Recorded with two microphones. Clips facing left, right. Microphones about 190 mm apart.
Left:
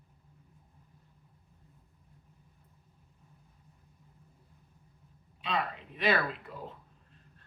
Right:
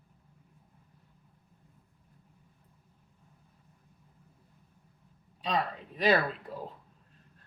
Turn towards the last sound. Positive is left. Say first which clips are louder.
# right 3 dB
turn(degrees=-35)  # may be behind; listen again after turning